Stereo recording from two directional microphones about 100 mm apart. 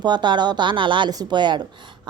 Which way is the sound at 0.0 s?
50° right (ahead or behind).